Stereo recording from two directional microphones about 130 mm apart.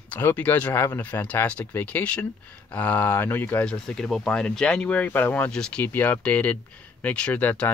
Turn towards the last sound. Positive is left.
turn(degrees=10)  # may be behind; listen again after turning